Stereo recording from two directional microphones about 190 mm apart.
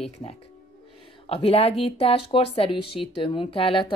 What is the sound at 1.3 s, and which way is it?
Speech, 30° left (ahead or behind).